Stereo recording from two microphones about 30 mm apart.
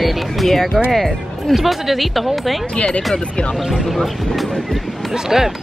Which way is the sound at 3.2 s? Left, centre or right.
Left.